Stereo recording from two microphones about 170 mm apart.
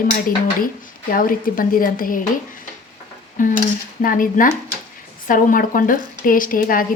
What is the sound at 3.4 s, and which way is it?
A woman's voice, 50° left (ahead or behind).